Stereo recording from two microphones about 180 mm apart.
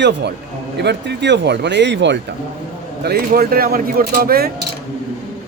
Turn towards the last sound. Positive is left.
turn(degrees=-60)  # may be behind; listen again after turning